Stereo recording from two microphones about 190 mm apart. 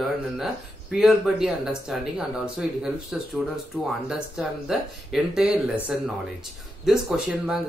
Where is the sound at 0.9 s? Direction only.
Centre (ahead or behind).